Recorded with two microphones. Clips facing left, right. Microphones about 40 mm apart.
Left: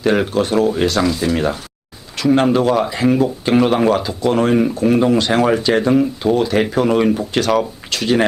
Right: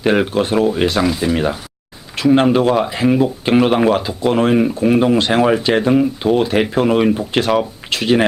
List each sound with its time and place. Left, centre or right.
0.0 s speech: centre
2.1 s speech: right